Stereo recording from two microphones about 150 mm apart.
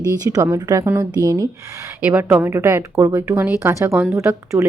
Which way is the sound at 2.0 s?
10° right (ahead or behind).